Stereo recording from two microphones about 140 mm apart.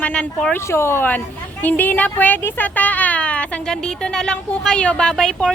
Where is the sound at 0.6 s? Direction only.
20° left (ahead or behind).